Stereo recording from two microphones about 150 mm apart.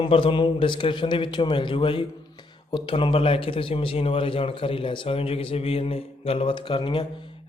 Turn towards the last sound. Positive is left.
turn(degrees=30)  # may be behind; listen again after turning